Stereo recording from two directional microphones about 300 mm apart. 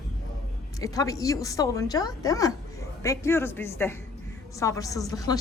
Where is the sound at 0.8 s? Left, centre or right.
Centre.